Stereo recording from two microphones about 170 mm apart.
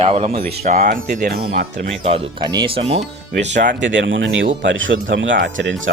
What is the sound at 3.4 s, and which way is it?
Speech, 90° right.